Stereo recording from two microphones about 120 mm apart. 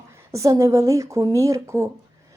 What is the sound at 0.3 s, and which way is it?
Speech, 25° right (ahead or behind).